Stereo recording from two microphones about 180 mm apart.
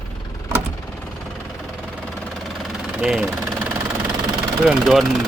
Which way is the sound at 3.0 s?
5° right (ahead or behind).